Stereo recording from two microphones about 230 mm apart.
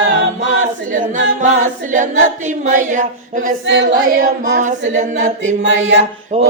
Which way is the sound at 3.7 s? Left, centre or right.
Right.